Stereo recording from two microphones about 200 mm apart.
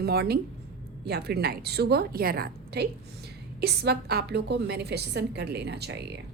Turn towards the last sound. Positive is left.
turn(degrees=-55)  # may be behind; listen again after turning